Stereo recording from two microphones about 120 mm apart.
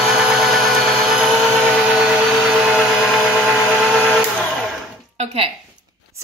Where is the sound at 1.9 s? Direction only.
5° right (ahead or behind).